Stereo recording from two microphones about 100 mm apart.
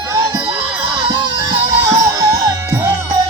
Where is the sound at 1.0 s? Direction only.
50° right (ahead or behind).